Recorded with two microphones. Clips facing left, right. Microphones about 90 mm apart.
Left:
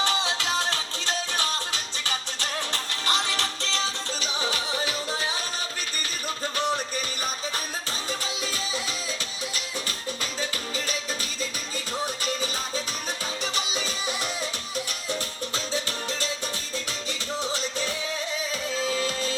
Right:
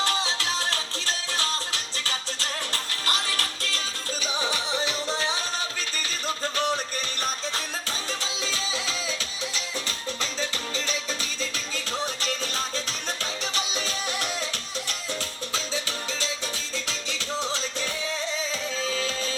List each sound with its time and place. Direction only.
0.0 s music: 20° left (ahead or behind)
3.1 s music: 20° left (ahead or behind)
4.8 s music: 10° left (ahead or behind)
7.2 s music: 10° left (ahead or behind)
10.4 s music: 10° left (ahead or behind)
18.9 s music: 10° left (ahead or behind)